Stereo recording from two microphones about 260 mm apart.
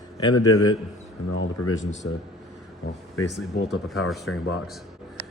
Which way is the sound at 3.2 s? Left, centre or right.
Left.